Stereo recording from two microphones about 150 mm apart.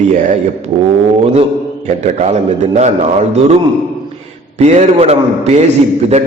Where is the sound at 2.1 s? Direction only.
50° right (ahead or behind).